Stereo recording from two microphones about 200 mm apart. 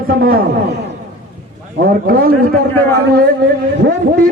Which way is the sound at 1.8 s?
45° right (ahead or behind).